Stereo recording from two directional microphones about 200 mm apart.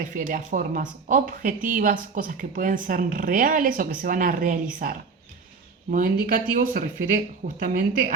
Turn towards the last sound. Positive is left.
turn(degrees=-45)  # may be behind; listen again after turning